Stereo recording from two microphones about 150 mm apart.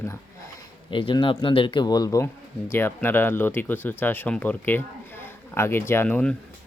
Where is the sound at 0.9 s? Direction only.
35° left (ahead or behind).